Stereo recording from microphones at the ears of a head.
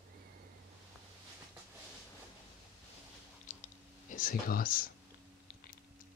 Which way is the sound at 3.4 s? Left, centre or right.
Left.